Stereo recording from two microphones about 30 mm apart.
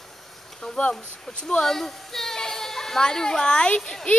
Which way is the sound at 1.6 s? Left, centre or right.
Centre.